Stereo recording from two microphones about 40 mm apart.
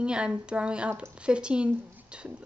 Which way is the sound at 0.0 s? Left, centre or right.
Right.